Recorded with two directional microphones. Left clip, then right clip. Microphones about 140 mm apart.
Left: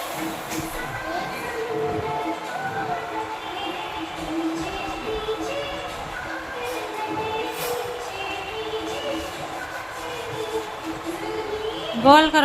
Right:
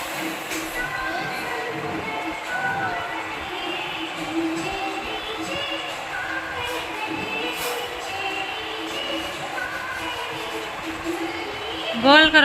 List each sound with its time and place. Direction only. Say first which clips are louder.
12.0 s a woman's voice: even; 25° left (ahead or behind)